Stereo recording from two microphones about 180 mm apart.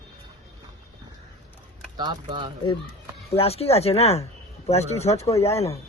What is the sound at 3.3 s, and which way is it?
Speech, 35° left (ahead or behind).